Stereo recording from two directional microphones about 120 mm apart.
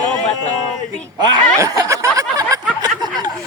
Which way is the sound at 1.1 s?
35° right (ahead or behind).